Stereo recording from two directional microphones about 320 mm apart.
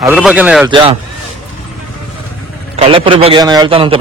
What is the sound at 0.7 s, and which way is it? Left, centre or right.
Speech, centre.